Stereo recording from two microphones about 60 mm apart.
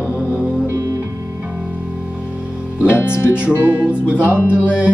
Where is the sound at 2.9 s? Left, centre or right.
Left.